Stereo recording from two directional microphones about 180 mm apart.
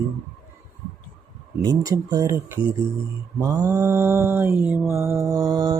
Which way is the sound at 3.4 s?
20° right (ahead or behind).